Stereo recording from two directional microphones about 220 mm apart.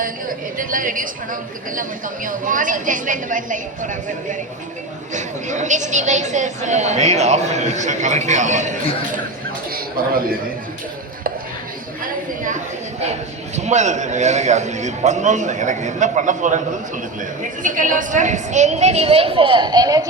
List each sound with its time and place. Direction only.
0.5 s a woman's voice: 40° right (ahead or behind)
10.0 s a woman's voice: 40° right (ahead or behind)
13.6 s a woman's voice: 30° right (ahead or behind); by 20.1 s 15° right (ahead or behind)